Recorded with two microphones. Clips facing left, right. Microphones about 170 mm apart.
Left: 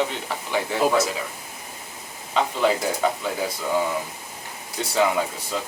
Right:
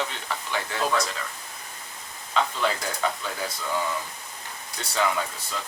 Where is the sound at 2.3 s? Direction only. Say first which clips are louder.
Left 4 dB; 15° left (ahead or behind).